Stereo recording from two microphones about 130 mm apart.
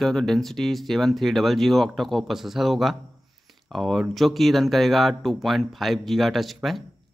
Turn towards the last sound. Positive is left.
turn(degrees=0)  # may be behind; listen again after turning